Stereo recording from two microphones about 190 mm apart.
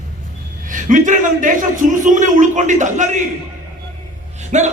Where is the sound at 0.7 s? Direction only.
45° right (ahead or behind).